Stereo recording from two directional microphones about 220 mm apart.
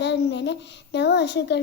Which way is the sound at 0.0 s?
50° left (ahead or behind).